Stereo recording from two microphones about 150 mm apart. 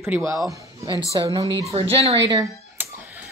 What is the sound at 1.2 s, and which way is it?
Speech, 25° right (ahead or behind).